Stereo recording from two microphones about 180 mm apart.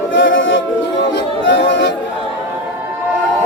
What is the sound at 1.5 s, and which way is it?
Chatter, 80° left.